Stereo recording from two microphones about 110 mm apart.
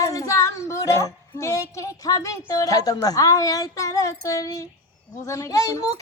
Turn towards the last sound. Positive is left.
turn(degrees=30)  # may be behind; listen again after turning